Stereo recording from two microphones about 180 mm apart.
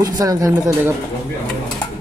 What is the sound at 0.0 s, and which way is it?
Speech, 20° right (ahead or behind).